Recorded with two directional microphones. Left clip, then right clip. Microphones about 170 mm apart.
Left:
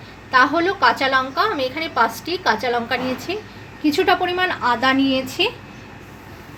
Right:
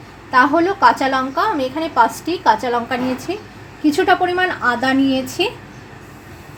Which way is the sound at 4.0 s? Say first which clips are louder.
Right 2 dB; 5° right (ahead or behind).